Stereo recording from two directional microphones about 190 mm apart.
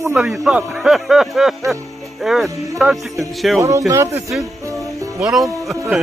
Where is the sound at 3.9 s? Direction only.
15° right (ahead or behind).